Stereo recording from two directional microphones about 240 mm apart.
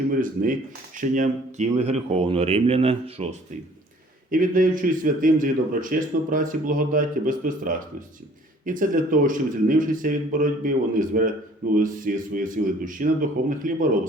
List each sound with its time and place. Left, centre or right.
0.1 s a man's voice: right
4.3 s a man's voice: right